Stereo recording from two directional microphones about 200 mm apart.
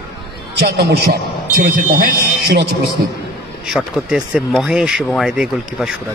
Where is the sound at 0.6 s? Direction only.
55° right (ahead or behind).